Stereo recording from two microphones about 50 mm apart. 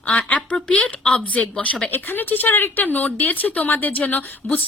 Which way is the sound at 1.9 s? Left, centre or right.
Left.